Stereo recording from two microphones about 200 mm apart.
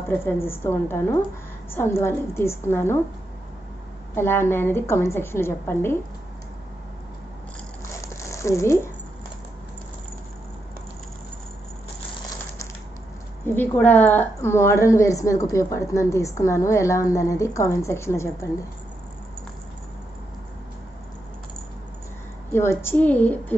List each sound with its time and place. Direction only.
0.2 s a woman's voice: 10° left (ahead or behind)
4.1 s a woman's voice: 10° left (ahead or behind)
7.9 s crumpling: 15° left (ahead or behind)
13.6 s a woman's voice: 10° left (ahead or behind)
22.5 s a woman's voice: 10° left (ahead or behind)